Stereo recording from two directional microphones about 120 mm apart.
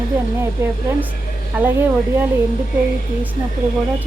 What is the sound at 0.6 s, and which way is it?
Speech, 20° right (ahead or behind).